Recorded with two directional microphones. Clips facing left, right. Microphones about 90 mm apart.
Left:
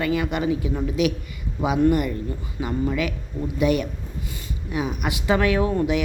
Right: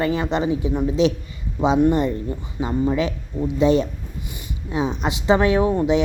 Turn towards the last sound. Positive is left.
turn(degrees=-25)  # may be behind; listen again after turning